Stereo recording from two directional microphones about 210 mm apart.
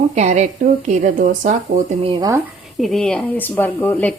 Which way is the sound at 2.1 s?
15° right (ahead or behind).